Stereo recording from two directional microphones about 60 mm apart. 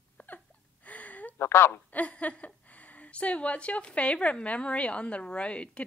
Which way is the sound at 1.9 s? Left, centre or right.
Left.